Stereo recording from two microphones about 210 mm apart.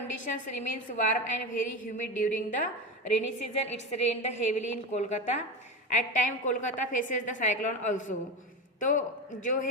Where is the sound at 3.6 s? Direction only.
30° left (ahead or behind).